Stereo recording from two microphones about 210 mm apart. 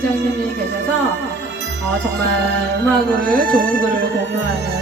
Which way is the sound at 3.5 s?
45° right (ahead or behind).